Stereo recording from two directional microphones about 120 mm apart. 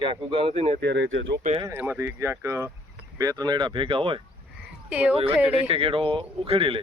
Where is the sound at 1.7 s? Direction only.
20° right (ahead or behind); by 4.2 s 45° right (ahead or behind).